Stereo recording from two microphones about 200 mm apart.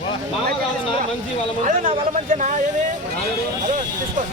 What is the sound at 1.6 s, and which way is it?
Speech, 40° right (ahead or behind).